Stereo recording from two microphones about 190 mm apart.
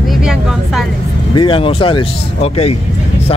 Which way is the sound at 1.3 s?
25° left (ahead or behind).